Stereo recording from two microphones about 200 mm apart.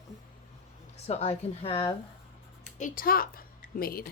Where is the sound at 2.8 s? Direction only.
45° left (ahead or behind).